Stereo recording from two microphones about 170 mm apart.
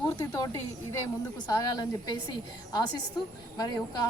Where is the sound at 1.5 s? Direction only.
25° left (ahead or behind).